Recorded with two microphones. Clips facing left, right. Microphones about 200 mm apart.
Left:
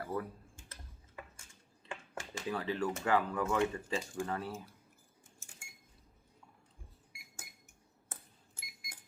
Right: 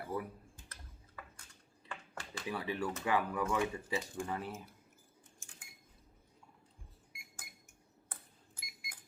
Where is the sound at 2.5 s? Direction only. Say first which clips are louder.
Left 2 dB; 10° right (ahead or behind).